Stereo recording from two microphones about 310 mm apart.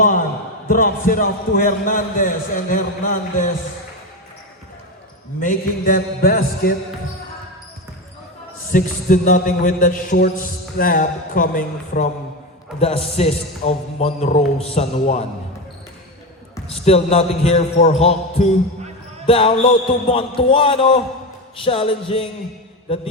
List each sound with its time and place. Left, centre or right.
0.7 s a man's voice: left
5.4 s a man's voice: left
8.7 s a man's voice: left
16.8 s a man's voice: centre
19.2 s a man's voice: centre